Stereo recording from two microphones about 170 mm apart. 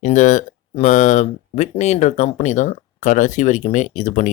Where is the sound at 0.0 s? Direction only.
45° left (ahead or behind).